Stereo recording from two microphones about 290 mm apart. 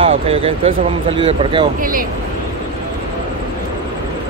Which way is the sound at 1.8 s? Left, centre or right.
Right.